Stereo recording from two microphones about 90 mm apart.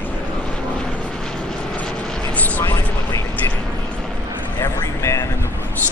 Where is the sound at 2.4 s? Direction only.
15° left (ahead or behind).